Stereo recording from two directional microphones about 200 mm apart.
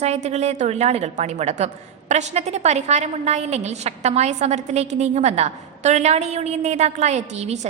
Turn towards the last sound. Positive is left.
turn(degrees=-35)  # may be behind; listen again after turning